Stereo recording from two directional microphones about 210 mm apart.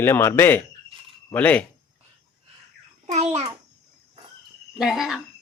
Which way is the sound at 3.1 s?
30° right (ahead or behind).